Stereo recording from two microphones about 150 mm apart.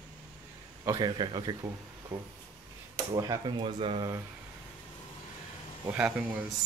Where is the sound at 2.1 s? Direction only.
10° right (ahead or behind).